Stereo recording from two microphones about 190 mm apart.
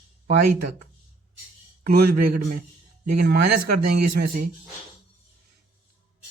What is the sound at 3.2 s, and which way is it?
Speech, 55° right (ahead or behind).